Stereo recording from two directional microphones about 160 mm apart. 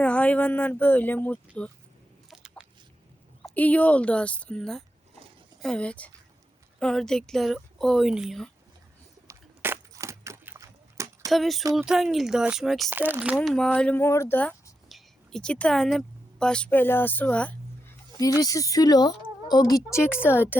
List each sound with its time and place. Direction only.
0.0 s speech: 5° left (ahead or behind)
3.5 s speech: 10° left (ahead or behind)
9.2 s a sound: 15° right (ahead or behind)
11.3 s speech: centre (ahead or behind)
12.9 s speech: 10° right (ahead or behind); by 17.9 s 10° left (ahead or behind)
18.2 s speech: 20° left (ahead or behind)